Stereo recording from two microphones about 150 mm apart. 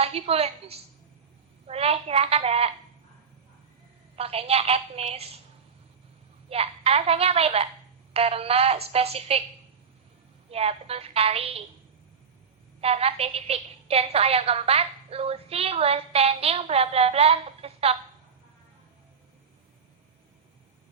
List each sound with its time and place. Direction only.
0.0 s a woman's voice: 40° right (ahead or behind)
4.1 s a woman's voice: 40° right (ahead or behind)
6.5 s a woman's voice: 40° right (ahead or behind)
10.5 s a woman's voice: 40° right (ahead or behind)
12.8 s a woman's voice: 40° right (ahead or behind)